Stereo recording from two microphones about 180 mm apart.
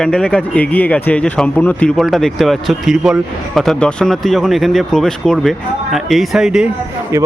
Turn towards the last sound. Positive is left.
turn(degrees=-15)  # may be behind; listen again after turning